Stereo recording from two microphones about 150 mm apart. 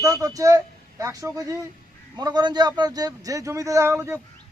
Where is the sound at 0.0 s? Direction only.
25° right (ahead or behind).